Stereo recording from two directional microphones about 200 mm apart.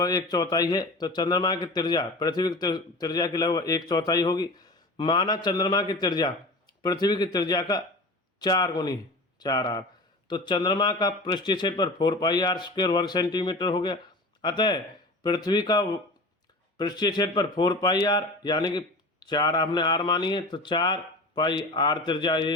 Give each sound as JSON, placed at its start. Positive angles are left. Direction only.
{"t": 0.0, "sound": "speech", "side_deg": 20}